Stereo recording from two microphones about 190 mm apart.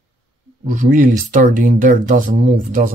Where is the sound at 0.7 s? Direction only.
45° right (ahead or behind).